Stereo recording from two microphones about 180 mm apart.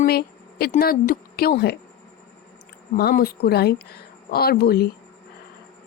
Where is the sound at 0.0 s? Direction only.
60° left (ahead or behind).